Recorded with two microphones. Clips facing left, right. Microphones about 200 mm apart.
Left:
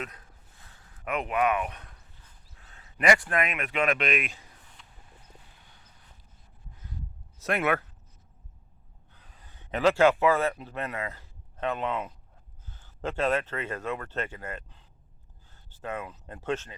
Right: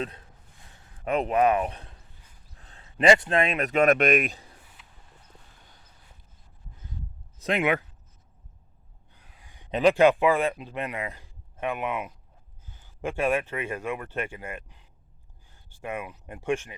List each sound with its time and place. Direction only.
0.0 s speech: 30° right (ahead or behind)
4.8 s a sound: 5° right (ahead or behind)
7.3 s speech: 15° right (ahead or behind)
9.1 s a man's voice: 10° right (ahead or behind)